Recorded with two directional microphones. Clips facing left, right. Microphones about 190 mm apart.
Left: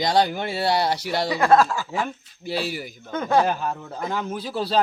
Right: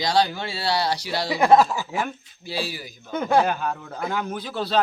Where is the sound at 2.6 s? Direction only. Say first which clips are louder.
Left 4 dB; 55° left (ahead or behind).